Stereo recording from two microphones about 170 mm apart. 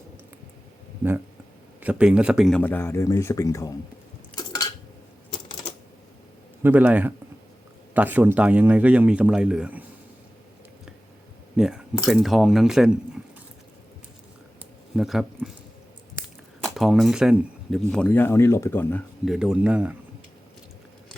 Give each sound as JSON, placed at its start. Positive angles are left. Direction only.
{"t": 1.8, "sound": "speech", "side_deg": -5}
{"t": 2.6, "sound": "speech", "side_deg": 10}
{"t": 4.4, "sound": "dishes", "side_deg": 25}
{"t": 6.6, "sound": "speech", "side_deg": -10}
{"t": 11.5, "sound": "speech", "side_deg": -5}
{"t": 14.9, "sound": "speech", "side_deg": 0}
{"t": 16.6, "sound": "speech", "side_deg": 0}
{"t": 19.2, "sound": "speech", "side_deg": -5}